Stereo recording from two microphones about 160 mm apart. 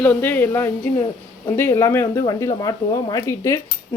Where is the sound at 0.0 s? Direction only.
10° left (ahead or behind).